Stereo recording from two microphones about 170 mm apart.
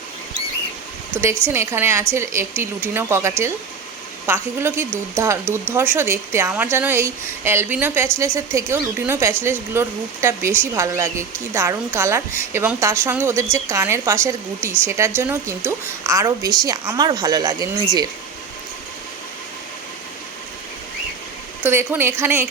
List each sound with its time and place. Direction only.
1.5 s speech: 15° right (ahead or behind)
21.6 s speech: 10° right (ahead or behind)